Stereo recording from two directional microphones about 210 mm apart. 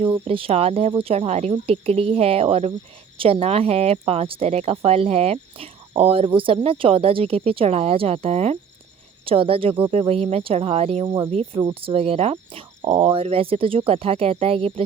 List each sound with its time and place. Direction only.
0.0 s speech: 25° right (ahead or behind)